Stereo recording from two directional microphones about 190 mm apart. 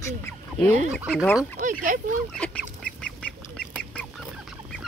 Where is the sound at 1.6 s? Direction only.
45° right (ahead or behind).